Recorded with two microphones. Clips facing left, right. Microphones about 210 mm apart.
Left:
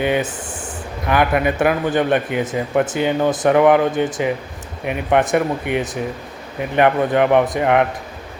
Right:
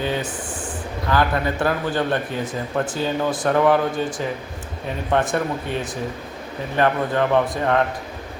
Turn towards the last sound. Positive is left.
turn(degrees=15)  # may be behind; listen again after turning